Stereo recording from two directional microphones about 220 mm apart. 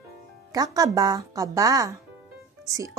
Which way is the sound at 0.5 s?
15° right (ahead or behind).